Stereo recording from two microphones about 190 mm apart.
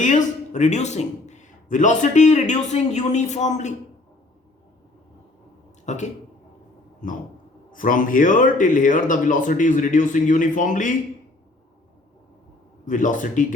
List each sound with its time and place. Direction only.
0.0 s a man's voice: 40° left (ahead or behind)
5.8 s a man's voice: 40° left (ahead or behind)
12.8 s a man's voice: 40° left (ahead or behind)